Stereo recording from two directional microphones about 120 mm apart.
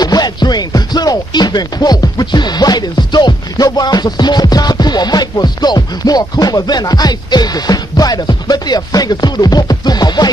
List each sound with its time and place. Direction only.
0.0 s music: 35° left (ahead or behind)